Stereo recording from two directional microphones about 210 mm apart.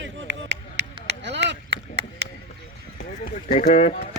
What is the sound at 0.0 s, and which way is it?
Chop, 60° right (ahead or behind).